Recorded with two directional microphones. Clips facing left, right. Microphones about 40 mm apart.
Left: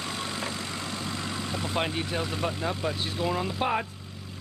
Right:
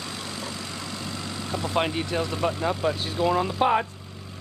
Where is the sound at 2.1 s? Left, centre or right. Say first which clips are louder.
Right 6 dB; centre.